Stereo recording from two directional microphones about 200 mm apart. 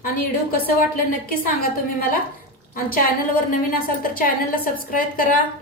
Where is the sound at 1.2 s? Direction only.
45° left (ahead or behind).